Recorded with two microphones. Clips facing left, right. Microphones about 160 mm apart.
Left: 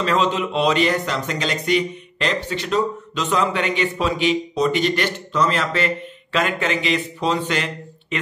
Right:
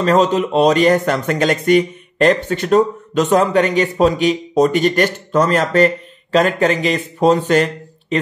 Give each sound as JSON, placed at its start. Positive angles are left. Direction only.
{"t": 0.0, "sound": "speech", "side_deg": -45}